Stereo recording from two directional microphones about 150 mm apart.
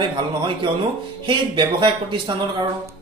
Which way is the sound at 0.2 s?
30° right (ahead or behind).